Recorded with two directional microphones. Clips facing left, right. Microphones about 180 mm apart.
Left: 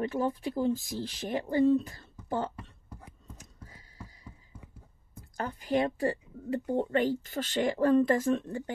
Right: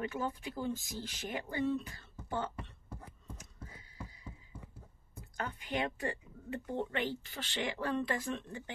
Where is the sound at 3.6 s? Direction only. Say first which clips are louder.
Even; 40° left (ahead or behind).